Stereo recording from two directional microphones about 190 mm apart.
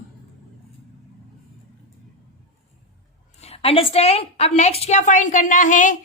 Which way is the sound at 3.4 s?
30° left (ahead or behind).